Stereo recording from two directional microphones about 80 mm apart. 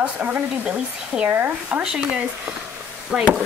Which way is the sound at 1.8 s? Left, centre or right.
Centre.